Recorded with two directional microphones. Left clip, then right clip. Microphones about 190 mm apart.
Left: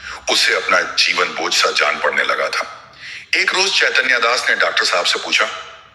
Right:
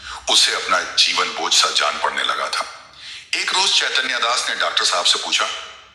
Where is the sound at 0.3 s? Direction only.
15° left (ahead or behind).